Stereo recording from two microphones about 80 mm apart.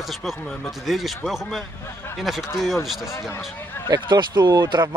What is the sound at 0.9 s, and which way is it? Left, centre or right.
Speech, centre.